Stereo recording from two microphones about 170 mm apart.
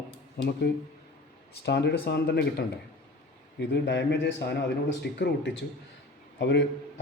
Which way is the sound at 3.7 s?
90° left.